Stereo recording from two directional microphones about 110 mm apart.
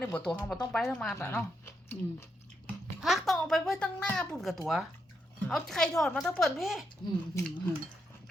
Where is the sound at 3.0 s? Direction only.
Centre (ahead or behind).